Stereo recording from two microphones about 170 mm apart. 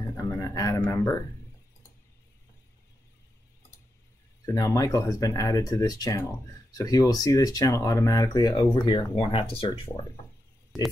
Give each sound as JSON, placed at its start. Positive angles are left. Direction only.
{"t": 0.0, "sound": "speech", "side_deg": 20}
{"t": 4.5, "sound": "speech", "side_deg": 20}